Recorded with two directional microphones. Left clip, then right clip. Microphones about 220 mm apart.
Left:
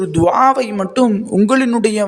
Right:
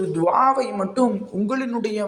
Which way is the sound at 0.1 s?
40° left (ahead or behind).